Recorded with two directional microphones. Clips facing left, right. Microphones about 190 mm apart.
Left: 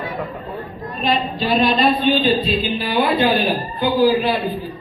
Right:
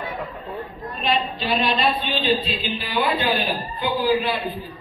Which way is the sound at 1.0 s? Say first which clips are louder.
Left 4 dB; 40° left (ahead or behind).